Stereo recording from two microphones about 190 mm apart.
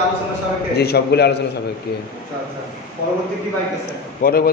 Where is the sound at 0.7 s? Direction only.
60° left (ahead or behind).